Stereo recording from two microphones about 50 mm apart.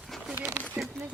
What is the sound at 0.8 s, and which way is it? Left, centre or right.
Speech, right.